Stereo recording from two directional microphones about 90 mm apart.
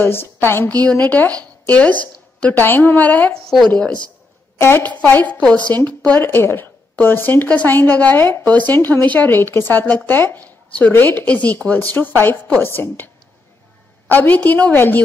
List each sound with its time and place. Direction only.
0.0 s a woman's voice: 25° left (ahead or behind)
0.7 s a woman's voice: 15° left (ahead or behind)
3.4 s speech: 5° left (ahead or behind)
4.6 s a woman's voice: 25° left (ahead or behind)